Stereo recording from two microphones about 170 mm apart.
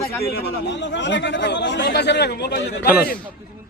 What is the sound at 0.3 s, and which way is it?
Speech, 80° left.